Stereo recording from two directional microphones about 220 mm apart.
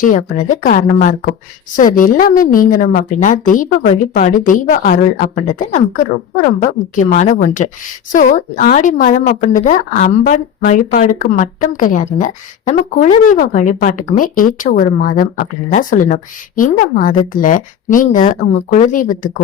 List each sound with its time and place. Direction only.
0.0 s a woman's voice: 35° left (ahead or behind)